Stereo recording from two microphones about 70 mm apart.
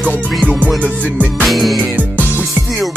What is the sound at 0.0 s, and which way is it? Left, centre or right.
Music, left.